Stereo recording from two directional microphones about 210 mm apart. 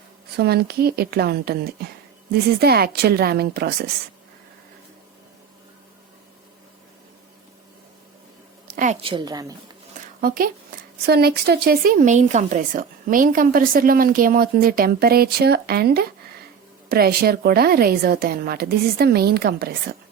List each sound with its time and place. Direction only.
0.3 s speech: 50° right (ahead or behind)
8.7 s a woman's voice: 35° right (ahead or behind); by 9.5 s 20° right (ahead or behind)
10.2 s speech: 45° right (ahead or behind)